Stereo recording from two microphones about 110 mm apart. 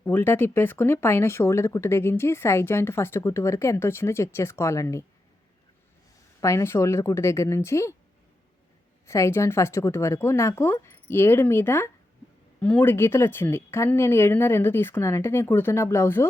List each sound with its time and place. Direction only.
0.0 s speech: 20° left (ahead or behind)
6.4 s speech: 25° left (ahead or behind)
9.0 s speech: 25° left (ahead or behind)